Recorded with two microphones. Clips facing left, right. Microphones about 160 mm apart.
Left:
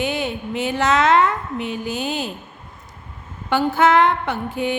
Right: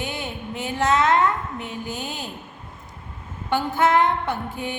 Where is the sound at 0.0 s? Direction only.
85° left.